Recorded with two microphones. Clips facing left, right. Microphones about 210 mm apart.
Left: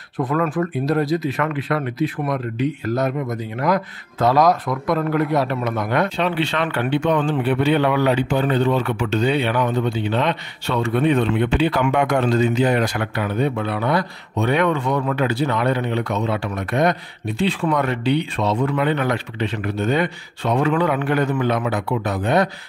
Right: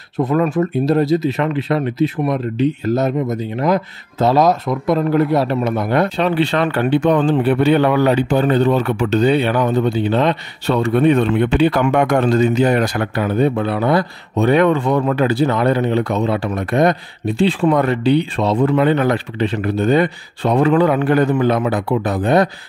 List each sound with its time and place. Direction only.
0.2 s speech: 25° right (ahead or behind)